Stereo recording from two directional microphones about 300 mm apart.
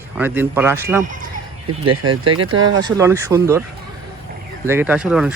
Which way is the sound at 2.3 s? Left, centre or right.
Right.